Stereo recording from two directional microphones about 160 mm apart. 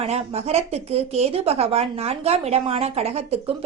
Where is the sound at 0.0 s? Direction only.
40° right (ahead or behind).